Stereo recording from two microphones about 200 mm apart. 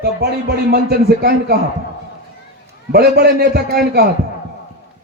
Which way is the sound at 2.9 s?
50° right (ahead or behind).